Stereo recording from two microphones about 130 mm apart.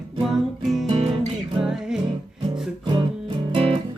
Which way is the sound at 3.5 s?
45° right (ahead or behind).